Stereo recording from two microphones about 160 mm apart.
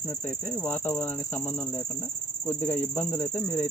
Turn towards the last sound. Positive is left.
turn(degrees=15)  # may be behind; listen again after turning